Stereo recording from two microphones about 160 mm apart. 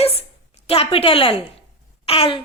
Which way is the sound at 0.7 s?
35° left (ahead or behind).